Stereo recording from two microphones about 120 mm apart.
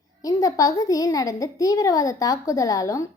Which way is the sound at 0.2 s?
30° left (ahead or behind).